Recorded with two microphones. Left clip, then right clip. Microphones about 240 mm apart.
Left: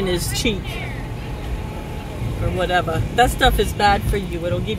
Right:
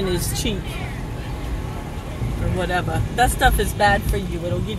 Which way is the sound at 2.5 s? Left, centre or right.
Left.